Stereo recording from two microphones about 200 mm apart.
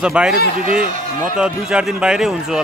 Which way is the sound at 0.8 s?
40° right (ahead or behind).